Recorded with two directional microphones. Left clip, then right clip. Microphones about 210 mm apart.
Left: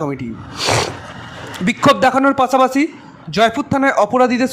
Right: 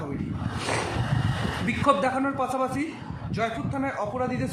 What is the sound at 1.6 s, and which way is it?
A man's voice, 45° left (ahead or behind).